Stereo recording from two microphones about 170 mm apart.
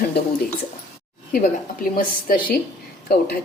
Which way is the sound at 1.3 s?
55° left (ahead or behind).